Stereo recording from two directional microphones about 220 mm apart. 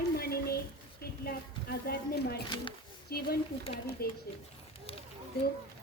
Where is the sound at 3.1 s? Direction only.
45° left (ahead or behind).